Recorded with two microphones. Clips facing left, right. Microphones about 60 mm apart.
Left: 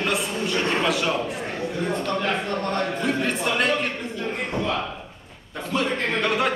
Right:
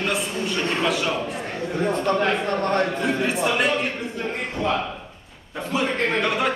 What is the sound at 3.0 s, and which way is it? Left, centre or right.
Speech, centre.